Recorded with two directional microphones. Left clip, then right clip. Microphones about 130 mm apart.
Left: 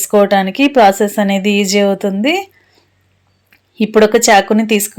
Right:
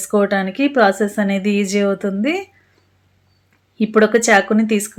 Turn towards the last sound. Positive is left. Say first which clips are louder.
# left 4 dB
turn(degrees=30)  # may be behind; listen again after turning